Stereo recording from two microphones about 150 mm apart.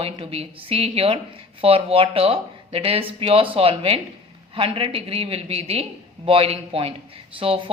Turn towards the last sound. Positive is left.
turn(degrees=-35)  # may be behind; listen again after turning